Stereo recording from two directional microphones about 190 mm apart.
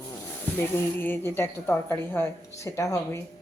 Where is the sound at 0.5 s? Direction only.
10° left (ahead or behind).